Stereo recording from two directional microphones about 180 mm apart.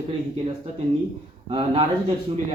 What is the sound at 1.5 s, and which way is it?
Speech, 30° right (ahead or behind).